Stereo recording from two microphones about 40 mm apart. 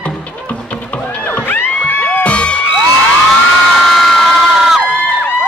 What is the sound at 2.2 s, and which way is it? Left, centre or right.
Music, left.